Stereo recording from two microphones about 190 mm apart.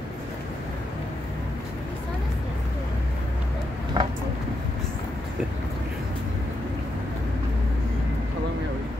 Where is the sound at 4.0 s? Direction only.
25° right (ahead or behind).